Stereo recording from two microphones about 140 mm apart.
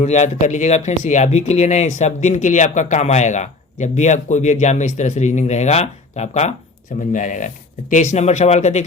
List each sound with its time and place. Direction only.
0.0 s speech: 55° left (ahead or behind)
7.1 s speech: 65° left (ahead or behind)